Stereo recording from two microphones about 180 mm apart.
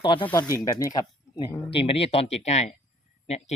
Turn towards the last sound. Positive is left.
turn(degrees=35)  # may be behind; listen again after turning